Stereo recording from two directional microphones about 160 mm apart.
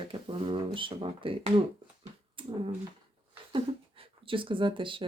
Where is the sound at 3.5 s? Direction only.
35° right (ahead or behind).